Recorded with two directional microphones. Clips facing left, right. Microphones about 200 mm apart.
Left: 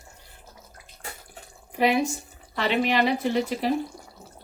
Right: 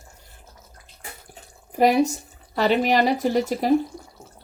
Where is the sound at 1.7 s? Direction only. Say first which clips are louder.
Right 4 dB; 40° right (ahead or behind).